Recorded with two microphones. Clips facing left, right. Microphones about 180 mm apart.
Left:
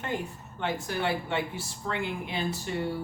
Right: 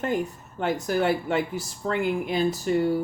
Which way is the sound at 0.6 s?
40° right (ahead or behind).